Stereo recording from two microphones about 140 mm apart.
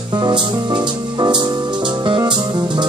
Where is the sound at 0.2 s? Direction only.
30° right (ahead or behind).